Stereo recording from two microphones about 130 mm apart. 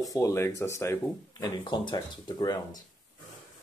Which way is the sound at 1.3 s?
35° left (ahead or behind).